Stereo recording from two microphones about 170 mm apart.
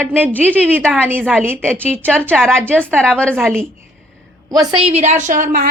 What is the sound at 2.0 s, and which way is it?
A woman's voice, 5° left (ahead or behind).